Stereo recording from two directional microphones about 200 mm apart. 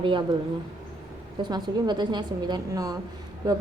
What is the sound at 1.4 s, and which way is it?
A woman's voice, 20° right (ahead or behind).